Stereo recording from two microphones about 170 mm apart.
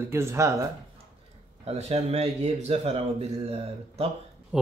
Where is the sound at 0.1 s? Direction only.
15° right (ahead or behind).